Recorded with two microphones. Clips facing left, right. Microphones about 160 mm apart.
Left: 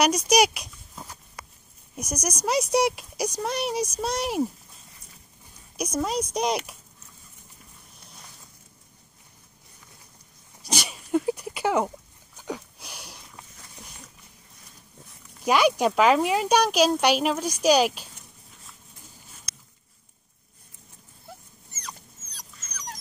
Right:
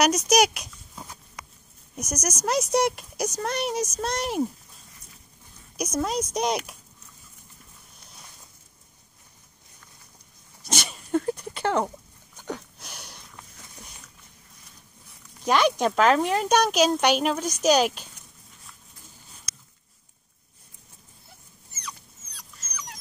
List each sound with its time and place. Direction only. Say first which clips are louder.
0.0 s a sound: even; centre (ahead or behind)
2.0 s speech: even; centre (ahead or behind)
5.8 s speech: even; centre (ahead or behind)
10.7 s sneeze: left 1 dB; centre (ahead or behind)
12.4 s a sound: even; centre (ahead or behind)
15.4 s speech: left 1 dB; 5° left (ahead or behind)
21.8 s dog: right 1 dB; 40° left (ahead or behind)